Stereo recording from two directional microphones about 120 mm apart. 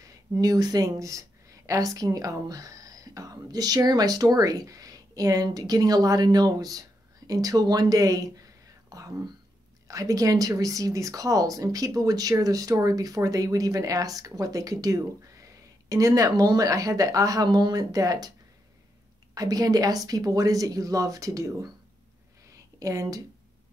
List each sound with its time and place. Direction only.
0.4 s speech: 30° right (ahead or behind)
8.8 s whispering: 30° right (ahead or behind)
9.8 s speech: 30° right (ahead or behind)
19.3 s speech: 30° right (ahead or behind)
22.8 s speech: 25° right (ahead or behind)